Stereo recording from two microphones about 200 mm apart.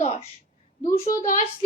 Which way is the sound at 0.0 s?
30° left (ahead or behind).